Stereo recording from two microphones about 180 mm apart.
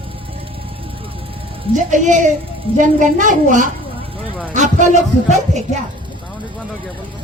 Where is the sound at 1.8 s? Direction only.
45° right (ahead or behind).